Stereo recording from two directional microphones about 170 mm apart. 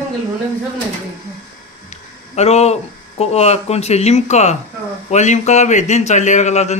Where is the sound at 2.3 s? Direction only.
40° left (ahead or behind).